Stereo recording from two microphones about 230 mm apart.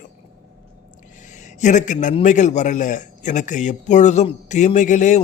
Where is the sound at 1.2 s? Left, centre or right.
Left.